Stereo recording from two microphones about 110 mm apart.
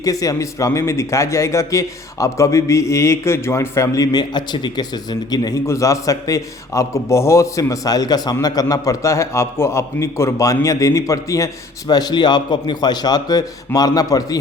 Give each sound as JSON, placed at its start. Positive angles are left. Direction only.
{"t": 0.0, "sound": "a man's voice", "side_deg": 35}